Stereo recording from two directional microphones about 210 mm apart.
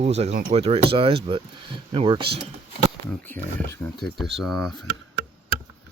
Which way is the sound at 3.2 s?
10° left (ahead or behind).